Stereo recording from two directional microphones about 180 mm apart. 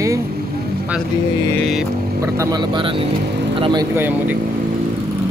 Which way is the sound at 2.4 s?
25° right (ahead or behind).